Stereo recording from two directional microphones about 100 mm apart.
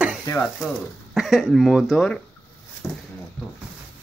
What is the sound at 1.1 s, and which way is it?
Speech, centre (ahead or behind).